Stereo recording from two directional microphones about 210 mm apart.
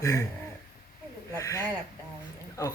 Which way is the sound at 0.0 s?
15° left (ahead or behind).